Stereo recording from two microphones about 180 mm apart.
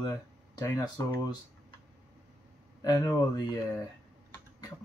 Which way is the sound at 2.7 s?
20° left (ahead or behind).